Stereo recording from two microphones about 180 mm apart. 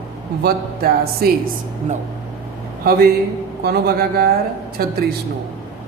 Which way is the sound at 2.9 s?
60° right (ahead or behind).